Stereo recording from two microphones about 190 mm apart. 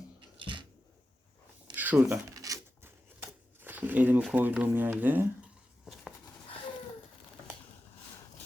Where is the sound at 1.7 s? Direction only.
10° right (ahead or behind).